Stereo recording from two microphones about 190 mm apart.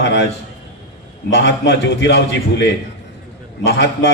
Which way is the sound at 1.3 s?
70° left (ahead or behind).